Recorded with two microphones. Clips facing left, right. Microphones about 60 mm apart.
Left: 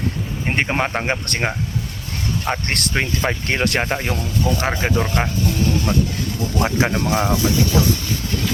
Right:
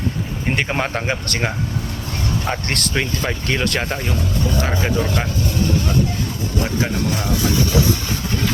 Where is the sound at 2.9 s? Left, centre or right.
Left.